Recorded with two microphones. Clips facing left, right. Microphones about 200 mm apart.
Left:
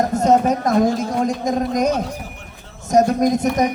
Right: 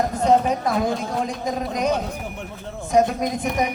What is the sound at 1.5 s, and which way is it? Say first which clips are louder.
Speech: left 3 dB; 45° left (ahead or behind).